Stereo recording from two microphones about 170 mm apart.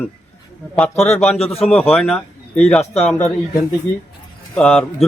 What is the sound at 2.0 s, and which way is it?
Speech, 5° left (ahead or behind).